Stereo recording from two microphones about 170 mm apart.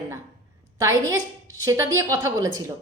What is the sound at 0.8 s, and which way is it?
A woman's voice, 20° right (ahead or behind).